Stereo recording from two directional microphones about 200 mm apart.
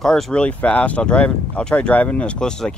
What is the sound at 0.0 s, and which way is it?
Speech, 5° left (ahead or behind).